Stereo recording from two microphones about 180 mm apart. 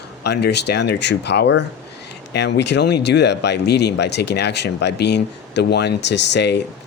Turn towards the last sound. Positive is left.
turn(degrees=75)  # may be behind; listen again after turning